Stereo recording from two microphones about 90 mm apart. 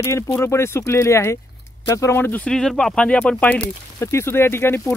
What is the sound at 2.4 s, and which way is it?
Speech, 5° left (ahead or behind).